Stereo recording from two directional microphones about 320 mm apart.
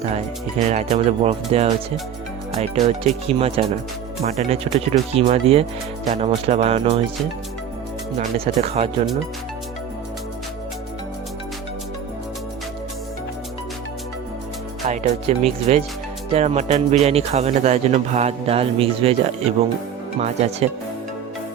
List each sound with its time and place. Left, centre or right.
0.7 s speech: right
8.6 s speech: centre
14.8 s music: right
15.3 s speech: right